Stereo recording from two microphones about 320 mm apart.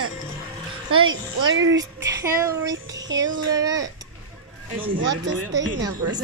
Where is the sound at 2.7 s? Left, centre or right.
Right.